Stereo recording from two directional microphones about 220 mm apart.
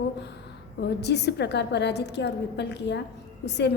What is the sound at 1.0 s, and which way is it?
A woman's voice, 50° left (ahead or behind).